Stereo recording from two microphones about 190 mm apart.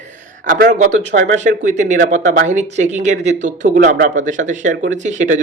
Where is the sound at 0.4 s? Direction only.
45° right (ahead or behind).